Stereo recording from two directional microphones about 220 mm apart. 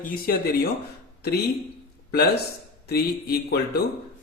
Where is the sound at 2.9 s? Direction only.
45° left (ahead or behind).